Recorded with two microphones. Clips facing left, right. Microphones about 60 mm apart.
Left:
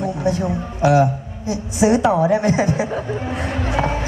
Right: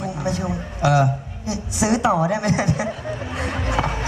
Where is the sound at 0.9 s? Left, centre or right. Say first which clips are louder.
Left 3 dB; left.